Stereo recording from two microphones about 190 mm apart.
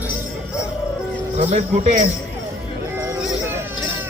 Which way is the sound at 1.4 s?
35° right (ahead or behind).